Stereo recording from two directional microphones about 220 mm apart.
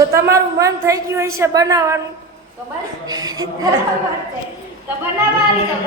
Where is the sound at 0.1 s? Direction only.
15° right (ahead or behind).